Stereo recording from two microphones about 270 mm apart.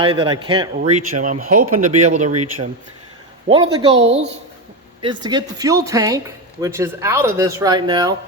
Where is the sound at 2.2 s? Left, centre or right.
Right.